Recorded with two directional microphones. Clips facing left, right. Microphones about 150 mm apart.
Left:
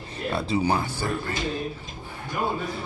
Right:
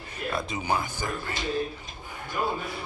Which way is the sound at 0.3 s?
35° left (ahead or behind).